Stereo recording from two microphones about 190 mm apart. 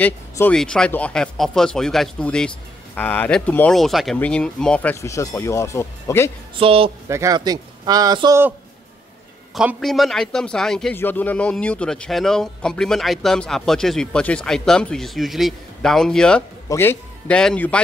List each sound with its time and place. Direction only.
0.0 s a man's voice: 5° left (ahead or behind)
6.6 s a man's voice: 30° right (ahead or behind)
7.1 s a man's voice: 15° right (ahead or behind)
9.6 s a man's voice: centre (ahead or behind)